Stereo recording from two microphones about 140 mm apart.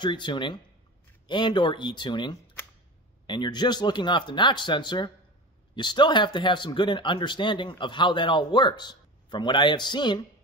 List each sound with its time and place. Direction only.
0.0 s speech: 35° left (ahead or behind)